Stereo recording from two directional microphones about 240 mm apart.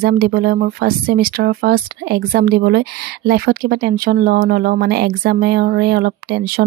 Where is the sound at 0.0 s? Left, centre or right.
Right.